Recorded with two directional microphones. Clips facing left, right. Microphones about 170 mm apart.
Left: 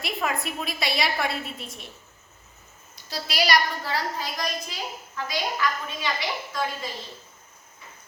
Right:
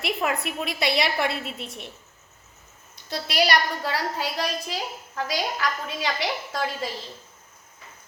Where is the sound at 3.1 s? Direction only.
60° right (ahead or behind).